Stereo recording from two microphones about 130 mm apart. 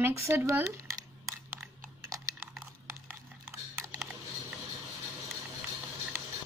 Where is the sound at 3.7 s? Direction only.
20° right (ahead or behind).